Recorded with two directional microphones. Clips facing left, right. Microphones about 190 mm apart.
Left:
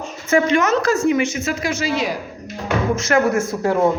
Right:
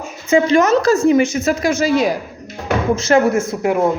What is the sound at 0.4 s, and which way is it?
A woman's voice, 35° right (ahead or behind).